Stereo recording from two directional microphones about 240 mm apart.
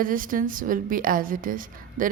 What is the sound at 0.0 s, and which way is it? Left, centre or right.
A woman's voice, right.